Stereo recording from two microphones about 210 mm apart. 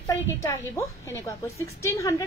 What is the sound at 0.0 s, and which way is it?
A woman's voice, 15° left (ahead or behind).